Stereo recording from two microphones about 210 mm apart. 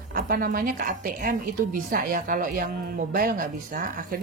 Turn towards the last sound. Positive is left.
turn(degrees=-45)  # may be behind; listen again after turning